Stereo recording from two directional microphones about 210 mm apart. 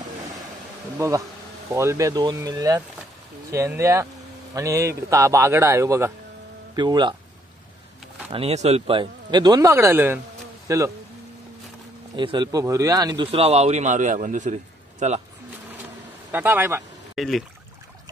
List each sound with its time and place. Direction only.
0.9 s speech: 15° right (ahead or behind)
8.3 s speech: 30° right (ahead or behind)
12.2 s speech: 20° right (ahead or behind)
16.3 s speech: 10° right (ahead or behind)
17.1 s speech: centre (ahead or behind)